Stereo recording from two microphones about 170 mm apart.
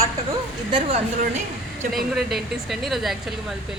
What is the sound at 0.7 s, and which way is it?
Speech, 35° right (ahead or behind).